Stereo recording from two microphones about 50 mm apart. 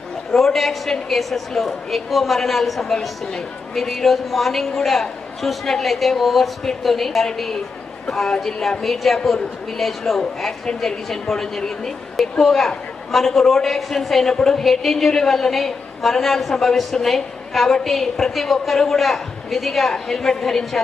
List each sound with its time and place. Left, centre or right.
0.3 s a man's voice: centre